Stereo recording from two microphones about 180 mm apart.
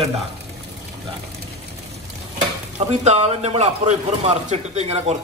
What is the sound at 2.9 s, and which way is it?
A man's voice, 35° right (ahead or behind).